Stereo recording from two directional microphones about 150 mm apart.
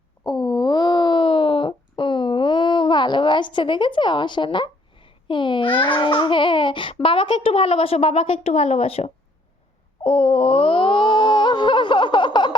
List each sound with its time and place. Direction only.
0.3 s speech: 30° left (ahead or behind)
10.0 s wail: 40° left (ahead or behind)